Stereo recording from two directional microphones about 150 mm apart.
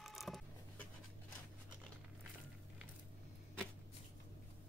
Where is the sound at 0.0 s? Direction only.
Centre (ahead or behind).